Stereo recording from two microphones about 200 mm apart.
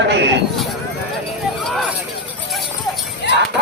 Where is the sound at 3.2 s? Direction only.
60° left (ahead or behind).